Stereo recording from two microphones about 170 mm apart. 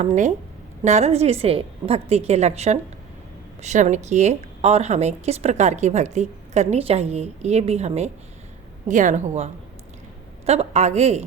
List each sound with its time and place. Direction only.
0.0 s a woman's voice: 45° right (ahead or behind)